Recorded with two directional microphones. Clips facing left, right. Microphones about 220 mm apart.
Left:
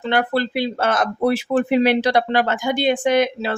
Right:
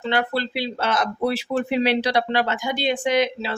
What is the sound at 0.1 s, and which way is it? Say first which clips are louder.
Speech: left 4 dB; 50° left (ahead or behind).